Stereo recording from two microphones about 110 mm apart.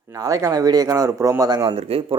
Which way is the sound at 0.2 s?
30° right (ahead or behind).